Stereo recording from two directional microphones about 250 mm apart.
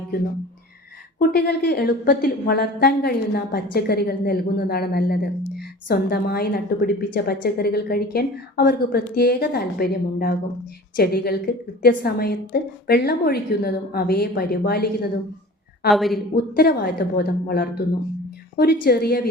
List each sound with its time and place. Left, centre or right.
1.3 s a woman's voice: left
15.9 s a woman's voice: centre
16.3 s a woman's voice: left